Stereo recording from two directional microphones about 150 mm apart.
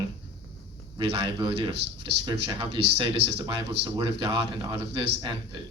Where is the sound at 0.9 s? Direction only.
35° right (ahead or behind).